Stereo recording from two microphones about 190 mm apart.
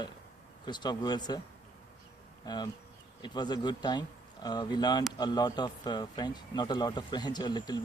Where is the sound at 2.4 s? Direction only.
20° left (ahead or behind).